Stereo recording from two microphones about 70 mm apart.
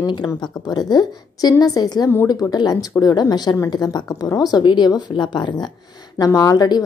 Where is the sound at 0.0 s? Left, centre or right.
Left.